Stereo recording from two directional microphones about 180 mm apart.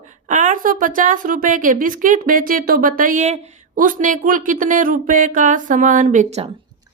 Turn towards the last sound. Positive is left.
turn(degrees=-35)  # may be behind; listen again after turning